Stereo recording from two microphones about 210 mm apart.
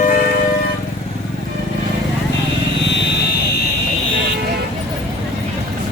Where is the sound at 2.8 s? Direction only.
55° left (ahead or behind).